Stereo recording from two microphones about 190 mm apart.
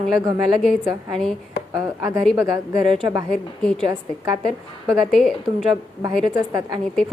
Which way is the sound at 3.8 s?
20° right (ahead or behind).